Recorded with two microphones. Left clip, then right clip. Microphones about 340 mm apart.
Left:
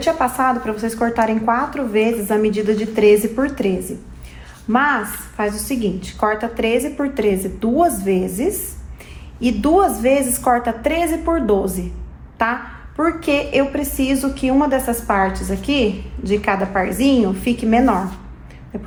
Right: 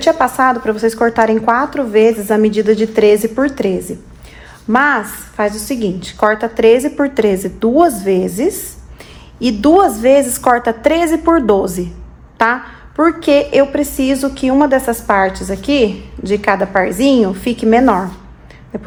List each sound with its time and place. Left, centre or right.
0.0 s a woman's voice: right
4.7 s a woman's voice: right
13.0 s a woman's voice: right